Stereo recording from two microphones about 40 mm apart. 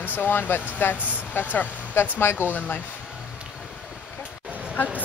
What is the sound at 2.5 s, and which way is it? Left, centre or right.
Speech, left.